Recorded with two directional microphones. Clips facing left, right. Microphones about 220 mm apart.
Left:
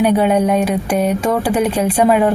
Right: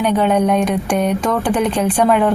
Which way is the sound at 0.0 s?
10° left (ahead or behind).